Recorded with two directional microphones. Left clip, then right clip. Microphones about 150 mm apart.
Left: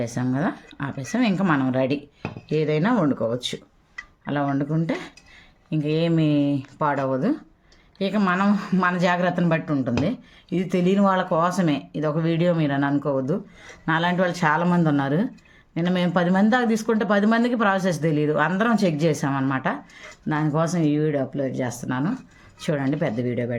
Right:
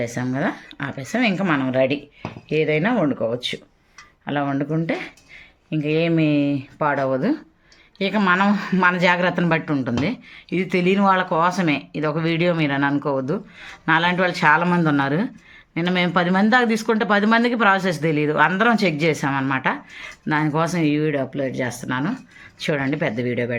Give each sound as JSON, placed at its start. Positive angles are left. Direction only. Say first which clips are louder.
{"t": 0.0, "sound": "speech", "louder": "right 2 dB", "side_deg": 40}
{"t": 4.3, "sound": "speech", "louder": "right 2 dB", "side_deg": 35}